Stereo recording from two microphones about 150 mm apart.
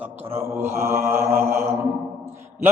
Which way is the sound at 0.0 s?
15° right (ahead or behind).